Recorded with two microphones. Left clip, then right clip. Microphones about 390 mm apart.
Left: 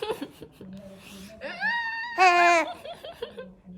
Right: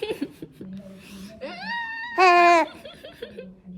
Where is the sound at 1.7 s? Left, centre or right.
Centre.